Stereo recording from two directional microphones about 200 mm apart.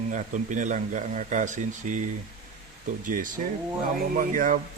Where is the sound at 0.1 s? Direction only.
40° right (ahead or behind).